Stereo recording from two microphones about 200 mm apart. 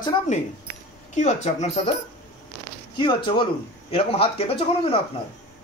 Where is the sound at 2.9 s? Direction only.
25° left (ahead or behind).